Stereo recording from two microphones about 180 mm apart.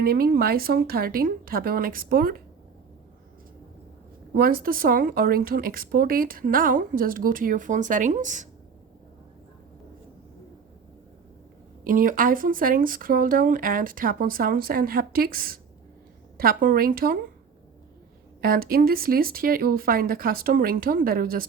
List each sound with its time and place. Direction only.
0.0 s speech: 55° right (ahead or behind)
4.4 s speech: 55° right (ahead or behind)
11.9 s speech: 50° right (ahead or behind)
18.4 s speech: 55° right (ahead or behind)